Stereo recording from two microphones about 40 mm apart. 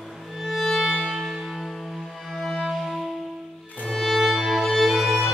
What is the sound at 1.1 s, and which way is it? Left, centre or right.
Music, centre.